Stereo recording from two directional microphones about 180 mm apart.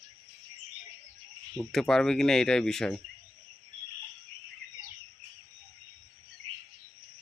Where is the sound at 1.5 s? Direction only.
5° left (ahead or behind).